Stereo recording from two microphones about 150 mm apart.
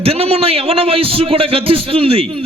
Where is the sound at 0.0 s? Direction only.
40° right (ahead or behind).